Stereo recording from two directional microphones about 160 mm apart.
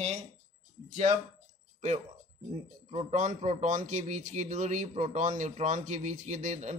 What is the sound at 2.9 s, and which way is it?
A man's voice, 45° right (ahead or behind).